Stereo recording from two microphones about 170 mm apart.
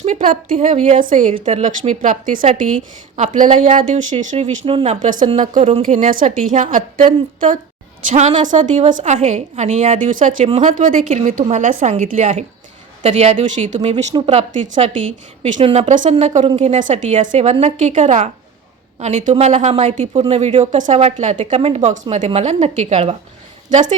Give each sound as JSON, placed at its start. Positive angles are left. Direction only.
{"t": 0.0, "sound": "a woman's voice", "side_deg": -45}
{"t": 1.5, "sound": "a woman's voice", "side_deg": -35}
{"t": 8.1, "sound": "a woman's voice", "side_deg": -40}